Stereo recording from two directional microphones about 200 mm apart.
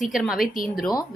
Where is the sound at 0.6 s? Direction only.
45° left (ahead or behind).